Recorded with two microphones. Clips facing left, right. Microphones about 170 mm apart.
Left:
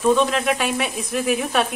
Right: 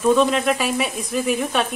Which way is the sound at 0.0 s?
Centre (ahead or behind).